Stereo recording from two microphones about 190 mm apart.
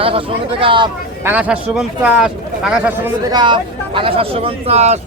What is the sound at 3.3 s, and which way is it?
Speech, 25° right (ahead or behind).